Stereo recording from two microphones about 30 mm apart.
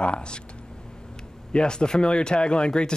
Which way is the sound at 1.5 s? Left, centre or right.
Left.